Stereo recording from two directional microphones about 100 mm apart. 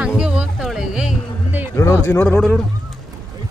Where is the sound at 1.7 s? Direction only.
25° left (ahead or behind).